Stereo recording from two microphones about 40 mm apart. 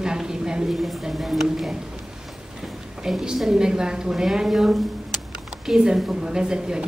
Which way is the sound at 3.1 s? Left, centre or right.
Centre.